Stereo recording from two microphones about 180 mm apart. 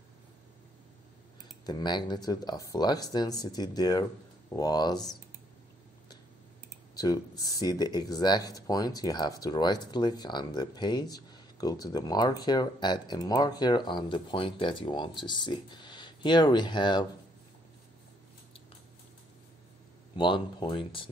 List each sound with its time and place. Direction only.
1.7 s speech: 25° left (ahead or behind)
7.0 s speech: 20° left (ahead or behind)
20.2 s speech: 25° left (ahead or behind)